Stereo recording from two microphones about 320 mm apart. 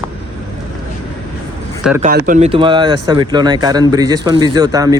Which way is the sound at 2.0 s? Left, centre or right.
Right.